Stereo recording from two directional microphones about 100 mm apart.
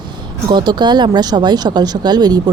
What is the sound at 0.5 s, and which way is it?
Speech, 45° right (ahead or behind).